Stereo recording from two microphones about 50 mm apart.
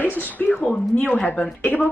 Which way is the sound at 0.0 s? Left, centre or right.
Left.